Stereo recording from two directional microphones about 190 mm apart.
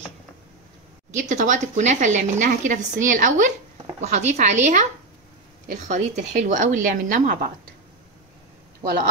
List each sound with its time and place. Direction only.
1.1 s speech: 40° right (ahead or behind)